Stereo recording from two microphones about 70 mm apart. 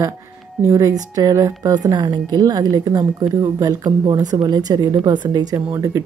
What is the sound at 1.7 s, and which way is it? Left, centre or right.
A woman's voice, right.